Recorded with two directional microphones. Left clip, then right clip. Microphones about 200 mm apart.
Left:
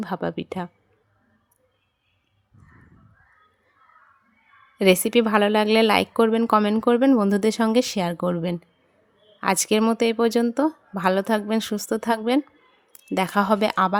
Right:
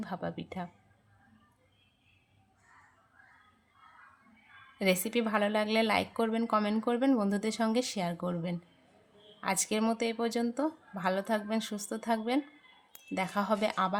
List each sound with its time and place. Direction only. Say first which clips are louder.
0.0 s a woman's voice: left 10 dB; 45° left (ahead or behind)
4.8 s a woman's voice: left 12 dB; 45° left (ahead or behind)